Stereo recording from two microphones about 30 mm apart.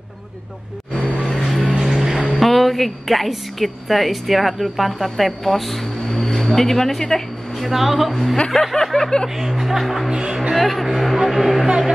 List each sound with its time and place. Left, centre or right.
1.3 s music: centre
1.8 s music: centre
2.3 s music: centre
3.5 s speech: centre
7.0 s a sound: centre
7.7 s speech: centre
8.1 s a sound: centre
9.6 s speech: centre
10.1 s speech: right
10.5 s speech: centre